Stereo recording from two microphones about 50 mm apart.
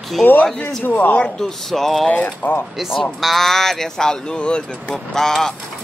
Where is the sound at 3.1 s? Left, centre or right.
Centre.